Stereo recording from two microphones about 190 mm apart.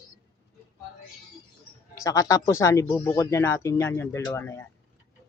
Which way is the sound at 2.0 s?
15° left (ahead or behind).